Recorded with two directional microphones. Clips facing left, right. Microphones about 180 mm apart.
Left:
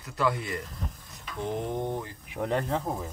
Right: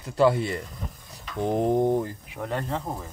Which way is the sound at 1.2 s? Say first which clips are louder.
Right 7 dB; 35° right (ahead or behind).